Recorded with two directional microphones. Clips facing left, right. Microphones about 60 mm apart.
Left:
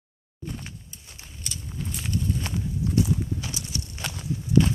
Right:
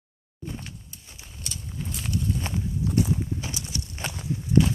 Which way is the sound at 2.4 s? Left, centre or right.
Centre.